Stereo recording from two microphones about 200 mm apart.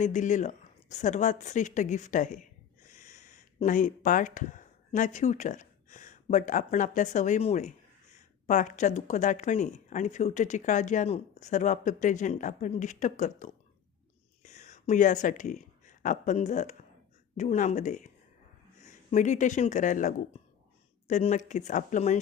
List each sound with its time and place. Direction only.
0.0 s a woman's voice: 40° left (ahead or behind)